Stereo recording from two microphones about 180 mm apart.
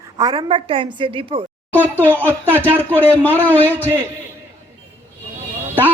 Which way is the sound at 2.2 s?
10° right (ahead or behind).